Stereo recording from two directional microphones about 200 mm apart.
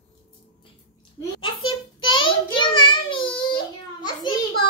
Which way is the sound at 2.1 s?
25° left (ahead or behind).